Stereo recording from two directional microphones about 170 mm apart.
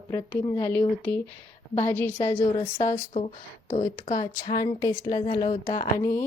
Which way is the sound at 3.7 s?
45° left (ahead or behind).